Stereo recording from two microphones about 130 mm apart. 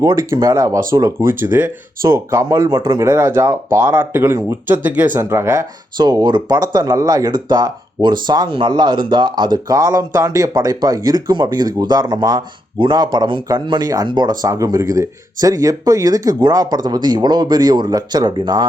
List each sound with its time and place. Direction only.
0.3 s speech: 25° right (ahead or behind)